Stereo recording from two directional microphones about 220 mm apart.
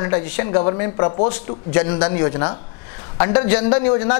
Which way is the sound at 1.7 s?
20° left (ahead or behind).